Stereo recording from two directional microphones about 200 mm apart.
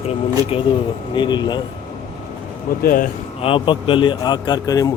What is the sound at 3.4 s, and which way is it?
Speech, 25° left (ahead or behind).